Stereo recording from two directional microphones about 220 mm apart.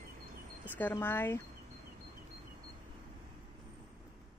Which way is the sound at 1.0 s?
10° left (ahead or behind).